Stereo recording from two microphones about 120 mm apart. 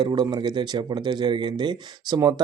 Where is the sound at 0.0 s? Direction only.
35° right (ahead or behind).